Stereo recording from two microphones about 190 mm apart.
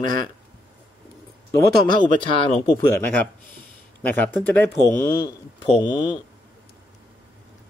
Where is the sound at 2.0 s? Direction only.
25° left (ahead or behind).